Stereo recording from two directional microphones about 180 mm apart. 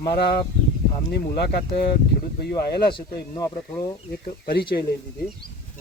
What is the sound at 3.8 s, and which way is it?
Speech, 55° left (ahead or behind).